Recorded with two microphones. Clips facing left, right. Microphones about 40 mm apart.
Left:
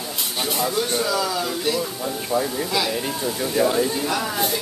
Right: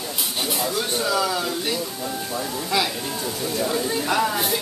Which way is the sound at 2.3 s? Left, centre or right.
Left.